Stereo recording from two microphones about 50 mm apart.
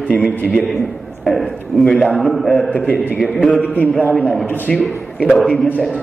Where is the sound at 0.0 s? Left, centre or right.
Left.